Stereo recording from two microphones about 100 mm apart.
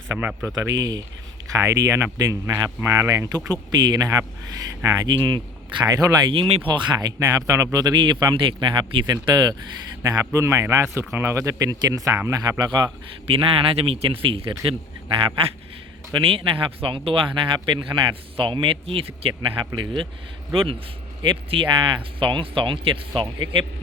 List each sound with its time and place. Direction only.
0.2 s speech: 20° right (ahead or behind)
0.8 s speech: 40° right (ahead or behind)
3.5 s speech: 45° right (ahead or behind)
4.2 s speech: 30° right (ahead or behind)
6.3 s speech: 65° right (ahead or behind)
6.7 s speech: 50° right (ahead or behind)
7.9 s speech: 50° right (ahead or behind)
13.3 s speech: 65° right (ahead or behind)
19.5 s speech: 55° right (ahead or behind)